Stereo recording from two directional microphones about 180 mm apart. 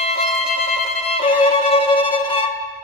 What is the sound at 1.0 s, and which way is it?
Violin, 35° left (ahead or behind).